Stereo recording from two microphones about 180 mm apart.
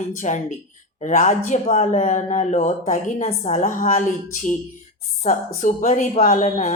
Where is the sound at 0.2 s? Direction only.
45° left (ahead or behind).